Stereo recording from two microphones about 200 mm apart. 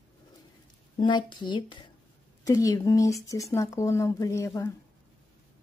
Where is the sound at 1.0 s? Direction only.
20° left (ahead or behind).